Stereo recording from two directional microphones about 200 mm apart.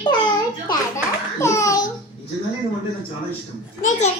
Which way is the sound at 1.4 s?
15° left (ahead or behind).